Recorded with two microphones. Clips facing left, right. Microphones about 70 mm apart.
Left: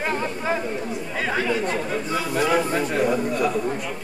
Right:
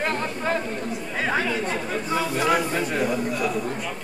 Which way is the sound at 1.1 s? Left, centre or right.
Centre.